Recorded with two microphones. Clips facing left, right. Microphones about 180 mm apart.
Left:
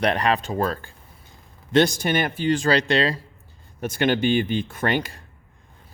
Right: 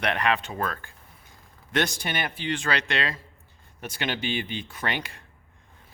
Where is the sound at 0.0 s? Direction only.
35° left (ahead or behind).